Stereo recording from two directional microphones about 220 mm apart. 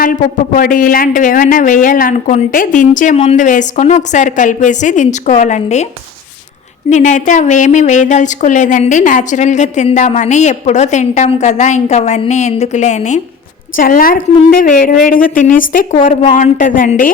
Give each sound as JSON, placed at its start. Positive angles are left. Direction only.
{"t": 0.0, "sound": "a woman's voice", "side_deg": 40}
{"t": 6.9, "sound": "a woman's voice", "side_deg": 35}